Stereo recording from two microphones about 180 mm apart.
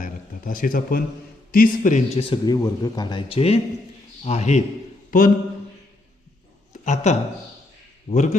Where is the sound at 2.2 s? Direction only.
25° left (ahead or behind); by 5.3 s 50° left (ahead or behind).